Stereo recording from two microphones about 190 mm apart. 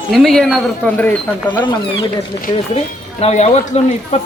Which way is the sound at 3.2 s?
35° left (ahead or behind).